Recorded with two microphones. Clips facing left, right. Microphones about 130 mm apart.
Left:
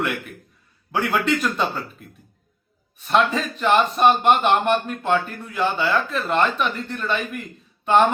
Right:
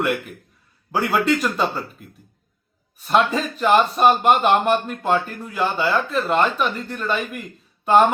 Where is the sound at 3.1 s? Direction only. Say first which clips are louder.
Right 1 dB; centre (ahead or behind).